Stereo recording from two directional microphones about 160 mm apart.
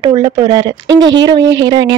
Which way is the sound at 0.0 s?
25° right (ahead or behind).